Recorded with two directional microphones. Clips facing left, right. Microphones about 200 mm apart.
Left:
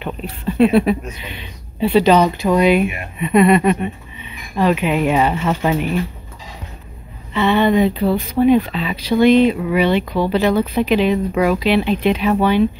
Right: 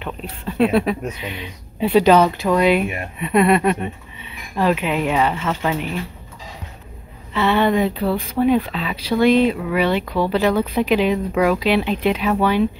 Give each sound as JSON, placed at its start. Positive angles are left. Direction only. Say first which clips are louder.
{"t": 0.0, "sound": "speech", "louder": "left 4 dB", "side_deg": 5}
{"t": 1.2, "sound": "speech", "louder": "right 3 dB", "side_deg": -5}
{"t": 7.3, "sound": "speech", "louder": "left 3 dB", "side_deg": -5}
{"t": 8.0, "sound": "speech", "louder": "left 3 dB", "side_deg": 15}
{"t": 8.5, "sound": "speech", "louder": "left 4 dB", "side_deg": 0}
{"t": 10.0, "sound": "speech", "louder": "left 1 dB", "side_deg": 15}
{"t": 10.7, "sound": "speech", "louder": "left 2 dB", "side_deg": -10}
{"t": 11.3, "sound": "speech", "louder": "right 2 dB", "side_deg": 5}
{"t": 11.6, "sound": "speech", "louder": "left 2 dB", "side_deg": -10}